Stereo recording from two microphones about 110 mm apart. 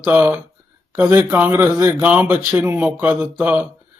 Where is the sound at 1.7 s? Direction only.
30° right (ahead or behind).